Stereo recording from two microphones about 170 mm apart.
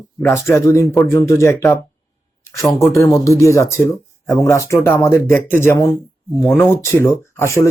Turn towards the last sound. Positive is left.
turn(degrees=15)  # may be behind; listen again after turning